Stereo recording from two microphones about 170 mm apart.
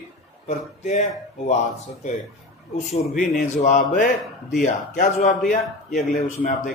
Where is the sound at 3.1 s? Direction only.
45° left (ahead or behind).